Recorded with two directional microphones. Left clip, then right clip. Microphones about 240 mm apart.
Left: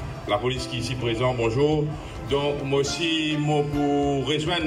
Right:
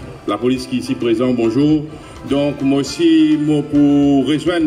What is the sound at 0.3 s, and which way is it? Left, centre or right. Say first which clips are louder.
Speech: right 7 dB; right.